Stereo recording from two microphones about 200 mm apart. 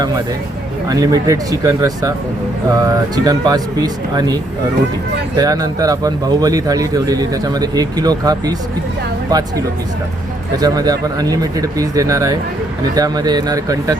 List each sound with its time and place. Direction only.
0.9 s a man's voice: 20° right (ahead or behind)
5.4 s a man's voice: 20° right (ahead or behind)
10.6 s a man's voice: 20° right (ahead or behind)